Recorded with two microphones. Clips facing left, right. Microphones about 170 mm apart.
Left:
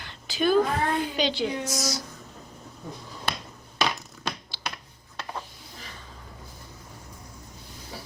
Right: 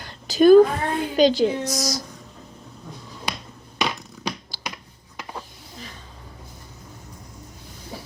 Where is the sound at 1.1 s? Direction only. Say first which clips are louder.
Right 9 dB; 40° right (ahead or behind).